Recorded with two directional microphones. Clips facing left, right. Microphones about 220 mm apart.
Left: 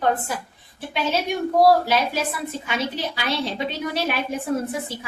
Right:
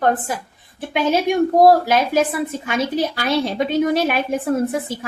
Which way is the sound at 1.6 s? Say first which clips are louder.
Right 2 dB; 50° right (ahead or behind).